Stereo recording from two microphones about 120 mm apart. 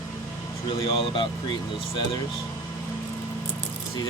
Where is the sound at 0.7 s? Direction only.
50° left (ahead or behind).